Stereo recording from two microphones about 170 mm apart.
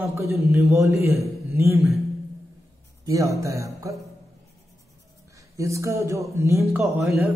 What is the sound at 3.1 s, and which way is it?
Music, 20° right (ahead or behind).